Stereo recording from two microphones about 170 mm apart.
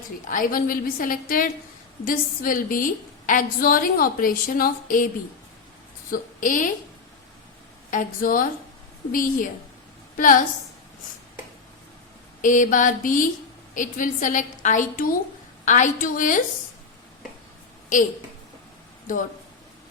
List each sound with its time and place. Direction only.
0.3 s a woman's voice: 55° left (ahead or behind)
6.1 s a woman's voice: 55° left (ahead or behind)
7.9 s a woman's voice: 50° left (ahead or behind)
12.4 s a woman's voice: 50° left (ahead or behind)